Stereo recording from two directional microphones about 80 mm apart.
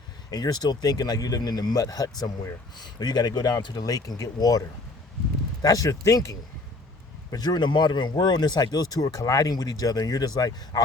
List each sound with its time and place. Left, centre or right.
0.3 s speech: left
2.7 s speech: left
5.6 s speech: left
7.3 s speech: left